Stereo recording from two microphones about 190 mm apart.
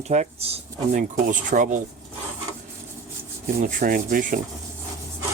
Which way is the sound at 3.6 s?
45° right (ahead or behind).